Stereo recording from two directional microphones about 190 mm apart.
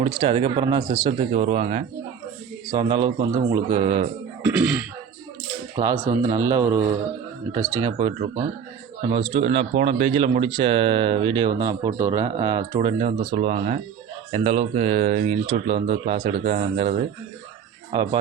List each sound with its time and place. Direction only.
0.0 s speech: 30° right (ahead or behind)
2.6 s speech: 25° right (ahead or behind)
5.7 s speech: 15° right (ahead or behind)